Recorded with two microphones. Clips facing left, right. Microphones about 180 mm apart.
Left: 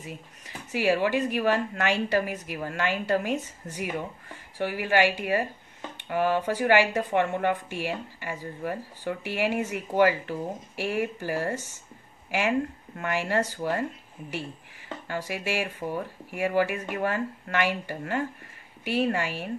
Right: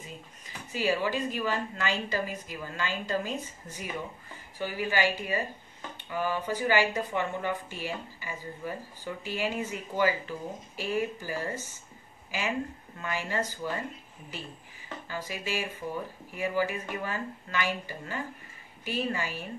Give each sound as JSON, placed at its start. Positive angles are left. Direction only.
{"t": 0.7, "sound": "speech", "side_deg": 70}
{"t": 15.0, "sound": "speech", "side_deg": 70}